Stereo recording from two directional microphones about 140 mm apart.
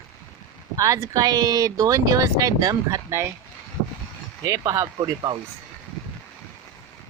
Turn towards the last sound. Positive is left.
turn(degrees=-30)  # may be behind; listen again after turning